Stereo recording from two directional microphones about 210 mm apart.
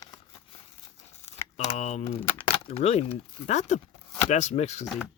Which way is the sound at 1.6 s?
30° left (ahead or behind).